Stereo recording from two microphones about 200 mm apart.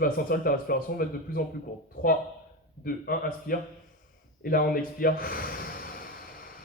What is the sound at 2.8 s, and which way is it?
Speech, 45° left (ahead or behind).